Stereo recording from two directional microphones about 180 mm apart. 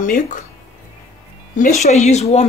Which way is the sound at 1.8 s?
40° left (ahead or behind).